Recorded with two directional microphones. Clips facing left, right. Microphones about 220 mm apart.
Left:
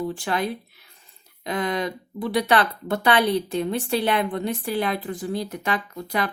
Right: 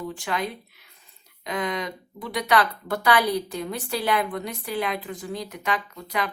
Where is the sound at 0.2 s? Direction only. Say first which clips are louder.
Left 3 dB; 30° left (ahead or behind).